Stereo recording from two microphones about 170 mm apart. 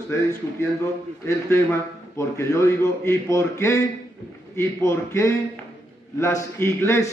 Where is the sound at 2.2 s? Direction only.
15° left (ahead or behind).